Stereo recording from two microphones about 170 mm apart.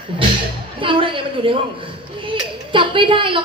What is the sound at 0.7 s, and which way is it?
A man's voice, 30° right (ahead or behind).